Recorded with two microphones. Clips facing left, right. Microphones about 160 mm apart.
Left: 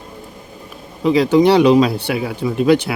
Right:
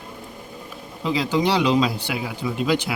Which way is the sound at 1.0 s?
60° left (ahead or behind).